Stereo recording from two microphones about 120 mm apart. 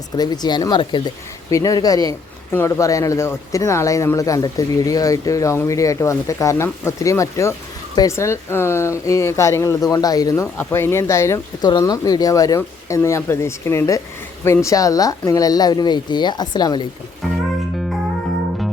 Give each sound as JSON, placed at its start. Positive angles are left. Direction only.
{"t": 0.2, "sound": "speech", "side_deg": 35}